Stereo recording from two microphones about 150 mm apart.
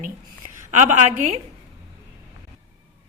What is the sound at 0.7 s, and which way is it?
Speech, 55° right (ahead or behind).